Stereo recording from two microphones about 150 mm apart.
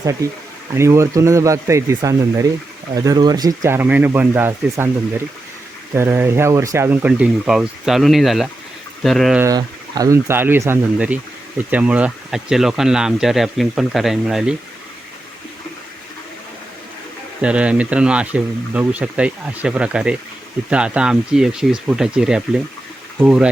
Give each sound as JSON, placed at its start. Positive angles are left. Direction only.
{"t": 0.0, "sound": "speech", "side_deg": -20}
{"t": 9.4, "sound": "speech", "side_deg": -25}
{"t": 17.4, "sound": "speech", "side_deg": -5}